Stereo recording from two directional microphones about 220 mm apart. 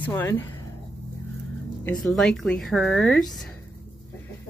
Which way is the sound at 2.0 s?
Centre (ahead or behind).